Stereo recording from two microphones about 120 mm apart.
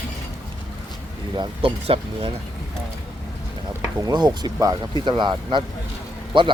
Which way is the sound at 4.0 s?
35° right (ahead or behind).